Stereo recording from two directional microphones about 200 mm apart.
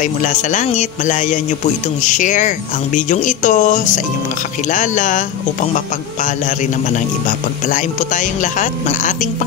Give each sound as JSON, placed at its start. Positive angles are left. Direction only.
{"t": 0.0, "sound": "speech", "side_deg": 35}
{"t": 7.2, "sound": "speech", "side_deg": 40}